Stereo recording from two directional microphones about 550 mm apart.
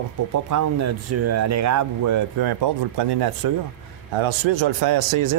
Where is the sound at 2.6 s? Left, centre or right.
Right.